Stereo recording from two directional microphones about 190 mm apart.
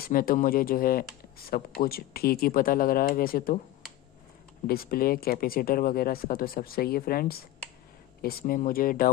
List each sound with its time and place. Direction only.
0.0 s speech: 50° left (ahead or behind)
4.6 s speech: 50° left (ahead or behind)